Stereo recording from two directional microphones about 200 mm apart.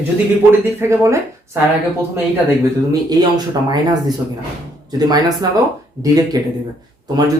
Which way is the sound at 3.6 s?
20° right (ahead or behind).